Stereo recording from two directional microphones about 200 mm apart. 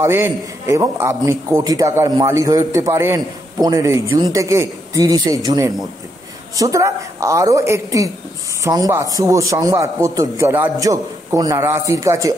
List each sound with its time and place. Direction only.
0.0 s a man's voice: 15° right (ahead or behind)